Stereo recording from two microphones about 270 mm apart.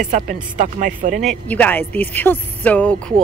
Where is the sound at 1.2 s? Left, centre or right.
Centre.